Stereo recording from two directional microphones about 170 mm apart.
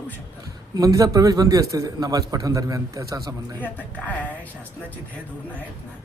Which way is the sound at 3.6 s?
10° left (ahead or behind).